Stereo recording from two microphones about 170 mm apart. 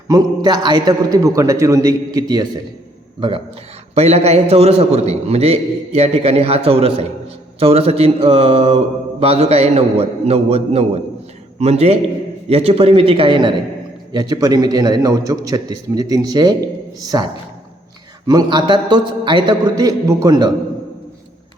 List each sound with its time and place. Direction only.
0.1 s a man's voice: 25° right (ahead or behind)
18.3 s a man's voice: 25° right (ahead or behind)